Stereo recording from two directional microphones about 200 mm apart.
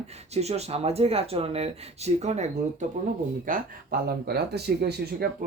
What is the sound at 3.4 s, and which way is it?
Speech, 45° right (ahead or behind).